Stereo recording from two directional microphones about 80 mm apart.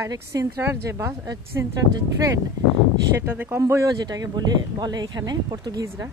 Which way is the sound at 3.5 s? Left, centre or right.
Right.